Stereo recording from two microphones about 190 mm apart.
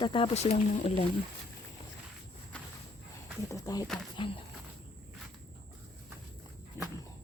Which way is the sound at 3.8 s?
Centre (ahead or behind).